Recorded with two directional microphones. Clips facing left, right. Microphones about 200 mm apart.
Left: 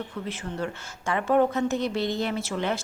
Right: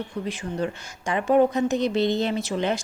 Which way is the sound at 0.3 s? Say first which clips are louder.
Right 4 dB; 15° right (ahead or behind).